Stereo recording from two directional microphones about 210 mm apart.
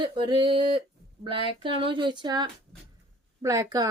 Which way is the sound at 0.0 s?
20° right (ahead or behind).